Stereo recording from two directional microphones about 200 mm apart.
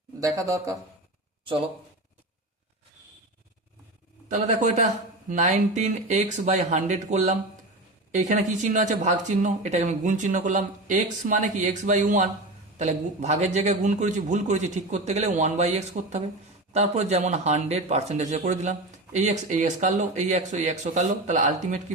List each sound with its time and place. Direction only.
0.2 s speech: 15° right (ahead or behind)
4.3 s speech: 35° right (ahead or behind)